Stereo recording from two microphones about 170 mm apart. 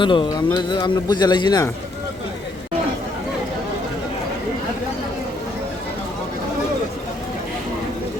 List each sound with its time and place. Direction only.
0.0 s speech: 30° left (ahead or behind)